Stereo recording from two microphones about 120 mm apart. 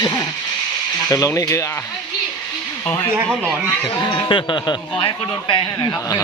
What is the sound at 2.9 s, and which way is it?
Speech, 10° left (ahead or behind).